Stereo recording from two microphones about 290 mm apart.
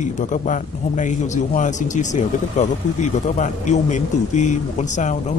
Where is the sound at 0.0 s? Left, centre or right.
Left.